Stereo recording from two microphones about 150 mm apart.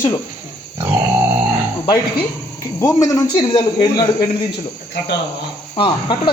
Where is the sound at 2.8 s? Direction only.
20° left (ahead or behind).